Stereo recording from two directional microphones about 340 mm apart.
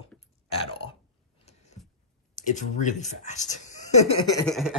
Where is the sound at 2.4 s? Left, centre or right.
Left.